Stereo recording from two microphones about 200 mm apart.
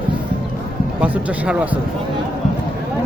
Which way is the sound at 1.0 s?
5° right (ahead or behind).